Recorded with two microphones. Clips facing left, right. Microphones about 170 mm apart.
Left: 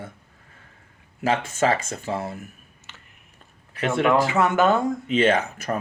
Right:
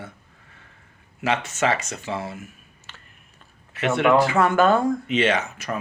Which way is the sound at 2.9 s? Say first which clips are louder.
Right 1 dB; 20° left (ahead or behind).